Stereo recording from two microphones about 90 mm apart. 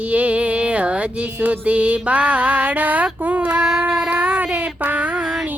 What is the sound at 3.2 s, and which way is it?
Child singing, 15° right (ahead or behind).